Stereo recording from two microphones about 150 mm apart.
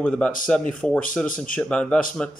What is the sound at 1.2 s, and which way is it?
Speech, 65° left (ahead or behind).